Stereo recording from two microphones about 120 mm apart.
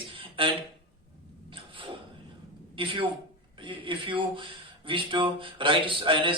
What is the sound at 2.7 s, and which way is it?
A woman's voice, 45° right (ahead or behind).